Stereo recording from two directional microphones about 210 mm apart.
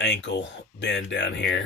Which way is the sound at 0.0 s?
55° left (ahead or behind).